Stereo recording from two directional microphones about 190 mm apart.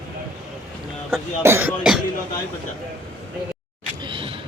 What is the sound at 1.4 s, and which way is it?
Speech, 15° right (ahead or behind).